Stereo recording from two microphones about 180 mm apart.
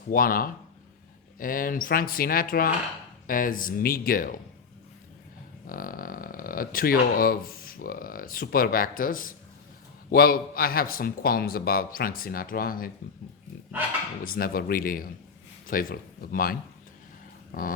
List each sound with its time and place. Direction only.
0.1 s speech: 55° left (ahead or behind)
5.6 s a man's voice: 50° left (ahead or behind)
14.3 s a man's voice: 55° left (ahead or behind)
17.5 s dog: 50° left (ahead or behind)